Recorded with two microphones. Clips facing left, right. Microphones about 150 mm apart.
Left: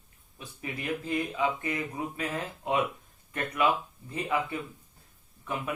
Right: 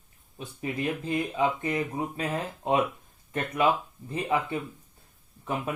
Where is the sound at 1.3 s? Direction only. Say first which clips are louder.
Right 3 dB; 25° right (ahead or behind).